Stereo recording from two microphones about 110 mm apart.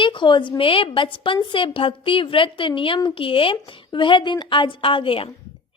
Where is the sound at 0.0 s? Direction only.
50° left (ahead or behind).